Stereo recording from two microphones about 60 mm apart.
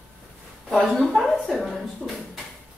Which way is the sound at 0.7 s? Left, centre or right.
Centre.